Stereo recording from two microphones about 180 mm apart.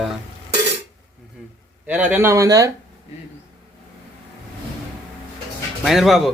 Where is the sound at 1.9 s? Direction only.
10° right (ahead or behind).